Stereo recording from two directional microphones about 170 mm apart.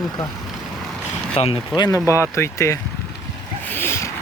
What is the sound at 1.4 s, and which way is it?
Speech, 35° left (ahead or behind).